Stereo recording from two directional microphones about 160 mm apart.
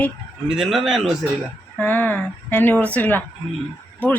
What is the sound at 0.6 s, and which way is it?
Speech, 5° right (ahead or behind).